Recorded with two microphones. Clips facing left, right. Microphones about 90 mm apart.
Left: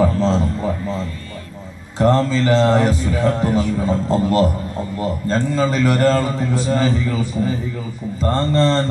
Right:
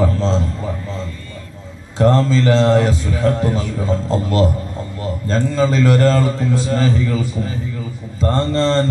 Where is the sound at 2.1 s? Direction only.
10° left (ahead or behind).